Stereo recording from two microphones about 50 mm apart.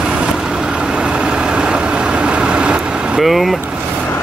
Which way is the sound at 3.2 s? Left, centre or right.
Centre.